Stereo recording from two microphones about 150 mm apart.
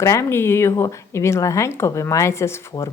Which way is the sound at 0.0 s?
20° left (ahead or behind).